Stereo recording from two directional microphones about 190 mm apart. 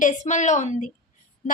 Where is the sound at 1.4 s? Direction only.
40° left (ahead or behind).